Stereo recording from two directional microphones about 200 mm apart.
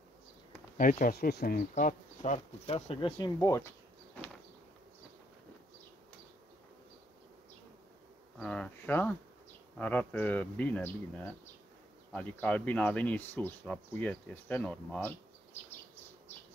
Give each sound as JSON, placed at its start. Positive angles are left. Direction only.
{"t": 0.7, "sound": "speech", "side_deg": 40}
{"t": 8.4, "sound": "speech", "side_deg": 5}
{"t": 12.1, "sound": "speech", "side_deg": 5}